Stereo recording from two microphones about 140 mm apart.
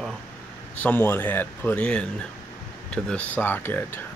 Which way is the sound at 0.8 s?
15° left (ahead or behind).